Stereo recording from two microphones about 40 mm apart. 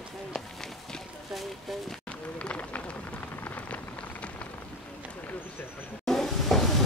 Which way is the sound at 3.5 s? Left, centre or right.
Left.